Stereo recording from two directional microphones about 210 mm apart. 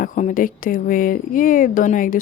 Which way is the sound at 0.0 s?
35° left (ahead or behind).